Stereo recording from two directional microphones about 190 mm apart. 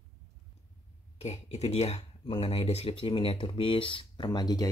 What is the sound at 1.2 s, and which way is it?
Speech, 35° left (ahead or behind).